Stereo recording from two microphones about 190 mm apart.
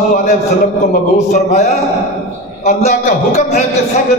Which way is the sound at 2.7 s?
35° left (ahead or behind).